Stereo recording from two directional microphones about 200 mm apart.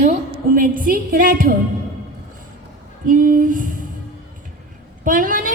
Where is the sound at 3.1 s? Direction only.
45° right (ahead or behind).